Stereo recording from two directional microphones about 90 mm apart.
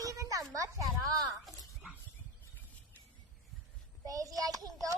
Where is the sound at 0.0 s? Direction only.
40° right (ahead or behind).